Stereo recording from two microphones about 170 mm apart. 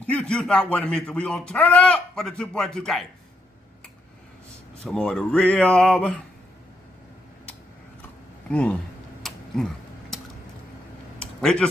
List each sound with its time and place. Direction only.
0.0 s a man's voice: 5° left (ahead or behind)
4.8 s a man's voice: 5° left (ahead or behind)
8.5 s speech: 5° left (ahead or behind)
9.2 s a sound: 5° left (ahead or behind)